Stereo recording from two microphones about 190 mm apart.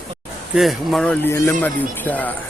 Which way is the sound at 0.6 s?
Centre (ahead or behind).